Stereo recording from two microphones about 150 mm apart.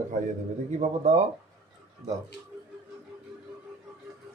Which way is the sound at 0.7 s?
45° right (ahead or behind).